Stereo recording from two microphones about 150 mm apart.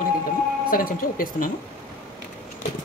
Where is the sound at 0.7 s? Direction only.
70° left (ahead or behind).